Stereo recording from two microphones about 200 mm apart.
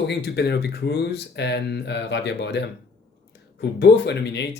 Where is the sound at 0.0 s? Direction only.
55° left (ahead or behind).